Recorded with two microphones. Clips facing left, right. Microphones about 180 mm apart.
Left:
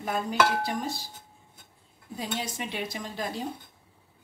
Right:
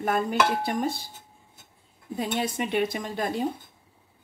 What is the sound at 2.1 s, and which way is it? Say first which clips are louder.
Speech: right 6 dB; 55° right (ahead or behind).